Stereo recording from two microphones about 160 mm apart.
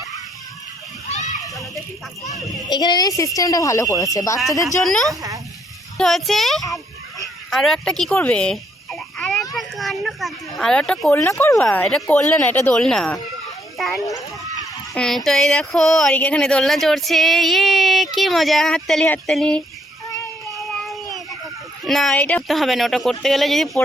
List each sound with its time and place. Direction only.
1.0 s water: 50° left (ahead or behind)
2.6 s speech: 25° left (ahead or behind)
4.8 s speech: centre (ahead or behind)
9.6 s children playing: centre (ahead or behind)
10.6 s speech: 5° left (ahead or behind)
13.7 s children playing: centre (ahead or behind)
14.9 s speech: 5° left (ahead or behind)
20.6 s a sound: centre (ahead or behind)
21.8 s speech: centre (ahead or behind)